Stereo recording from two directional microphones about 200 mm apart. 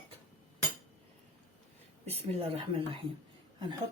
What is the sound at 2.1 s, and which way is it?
Speech, 30° right (ahead or behind).